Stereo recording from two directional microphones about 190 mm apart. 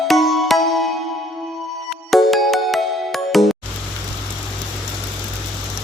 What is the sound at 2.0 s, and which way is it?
Music, centre (ahead or behind).